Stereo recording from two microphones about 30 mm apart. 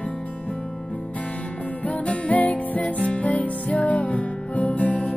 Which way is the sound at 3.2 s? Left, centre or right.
Left.